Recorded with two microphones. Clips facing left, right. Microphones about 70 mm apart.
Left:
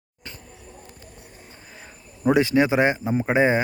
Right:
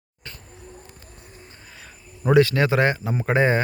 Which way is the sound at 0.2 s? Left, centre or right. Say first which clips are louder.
Even; centre.